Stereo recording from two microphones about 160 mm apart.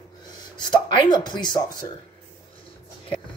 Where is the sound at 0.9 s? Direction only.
25° left (ahead or behind).